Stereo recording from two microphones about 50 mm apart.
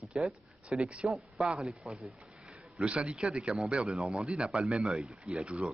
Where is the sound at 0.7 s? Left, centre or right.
Right.